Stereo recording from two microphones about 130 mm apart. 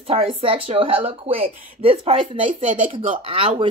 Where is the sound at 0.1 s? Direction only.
45° right (ahead or behind).